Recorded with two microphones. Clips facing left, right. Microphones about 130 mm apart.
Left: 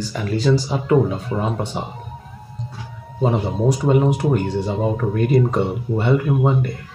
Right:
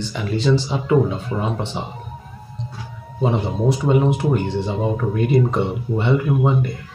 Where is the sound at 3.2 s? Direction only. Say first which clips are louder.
Left 1 dB; 50° left (ahead or behind).